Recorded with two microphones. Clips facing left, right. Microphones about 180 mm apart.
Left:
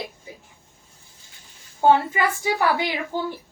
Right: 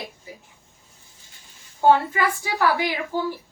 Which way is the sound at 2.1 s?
20° left (ahead or behind).